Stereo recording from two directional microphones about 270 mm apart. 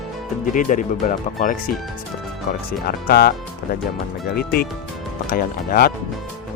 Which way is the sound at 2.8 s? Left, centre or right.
Left.